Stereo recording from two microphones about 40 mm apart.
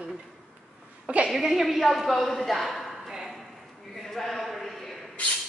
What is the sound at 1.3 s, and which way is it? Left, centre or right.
A woman's voice, centre.